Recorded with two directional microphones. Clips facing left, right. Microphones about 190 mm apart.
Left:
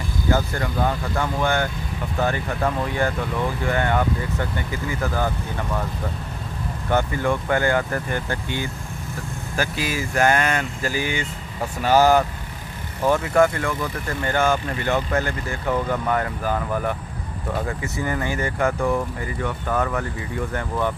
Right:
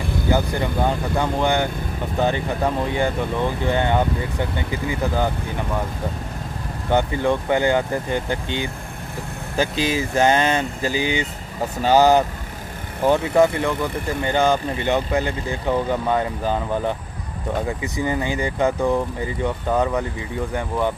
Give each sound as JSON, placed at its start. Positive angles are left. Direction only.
{"t": 0.3, "sound": "speech", "side_deg": -20}
{"t": 6.9, "sound": "speech", "side_deg": -20}